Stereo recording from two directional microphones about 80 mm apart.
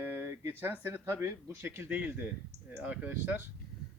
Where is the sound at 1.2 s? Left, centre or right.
Right.